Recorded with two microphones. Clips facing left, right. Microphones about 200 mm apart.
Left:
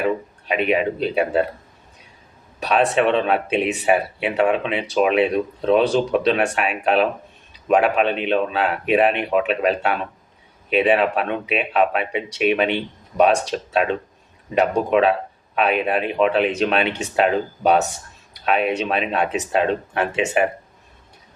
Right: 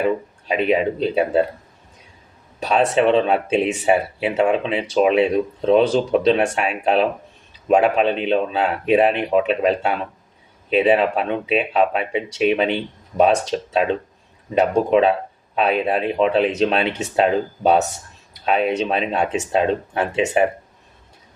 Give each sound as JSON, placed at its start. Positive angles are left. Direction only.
{"t": 0.4, "sound": "speech", "side_deg": -30}
{"t": 2.6, "sound": "speech", "side_deg": -30}
{"t": 18.4, "sound": "speech", "side_deg": -30}